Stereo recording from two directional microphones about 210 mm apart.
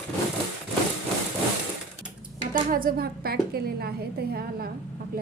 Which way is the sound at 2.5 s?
40° right (ahead or behind).